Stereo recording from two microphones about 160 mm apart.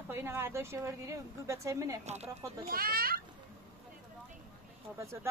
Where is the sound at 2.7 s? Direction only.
65° right (ahead or behind).